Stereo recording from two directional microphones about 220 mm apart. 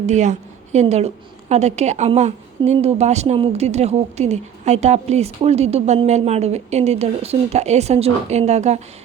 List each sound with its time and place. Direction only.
0.0 s a woman's voice: 30° right (ahead or behind)